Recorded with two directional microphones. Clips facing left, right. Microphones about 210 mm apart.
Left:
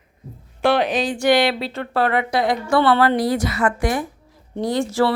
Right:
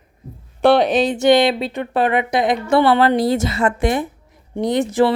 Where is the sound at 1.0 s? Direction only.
20° right (ahead or behind).